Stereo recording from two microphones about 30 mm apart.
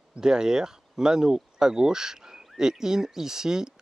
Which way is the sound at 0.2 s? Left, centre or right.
Right.